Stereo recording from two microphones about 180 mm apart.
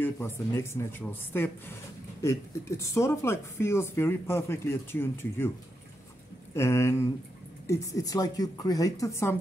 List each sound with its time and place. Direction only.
0.0 s speech: 15° left (ahead or behind)
2.8 s speech: 15° left (ahead or behind)
6.5 s speech: 15° left (ahead or behind)